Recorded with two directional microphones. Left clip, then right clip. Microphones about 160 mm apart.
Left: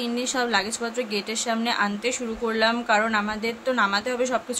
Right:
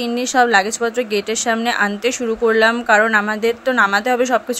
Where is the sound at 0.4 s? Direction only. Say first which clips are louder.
Right 11 dB; 45° right (ahead or behind).